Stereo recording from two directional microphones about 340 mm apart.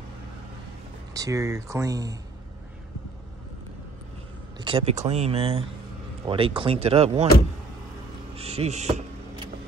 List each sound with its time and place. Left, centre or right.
1.1 s speech: centre
4.6 s speech: centre
8.4 s speech: centre